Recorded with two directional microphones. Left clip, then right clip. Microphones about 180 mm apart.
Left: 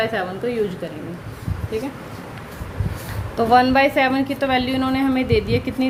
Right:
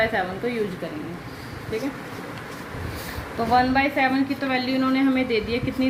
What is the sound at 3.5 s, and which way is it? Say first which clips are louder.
A woman's voice: left 5 dB; 55° left (ahead or behind).